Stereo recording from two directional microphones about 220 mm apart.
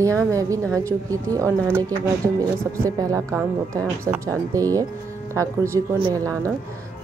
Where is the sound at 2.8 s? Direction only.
15° right (ahead or behind).